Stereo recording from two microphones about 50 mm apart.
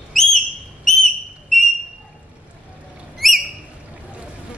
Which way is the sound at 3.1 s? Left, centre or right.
Centre.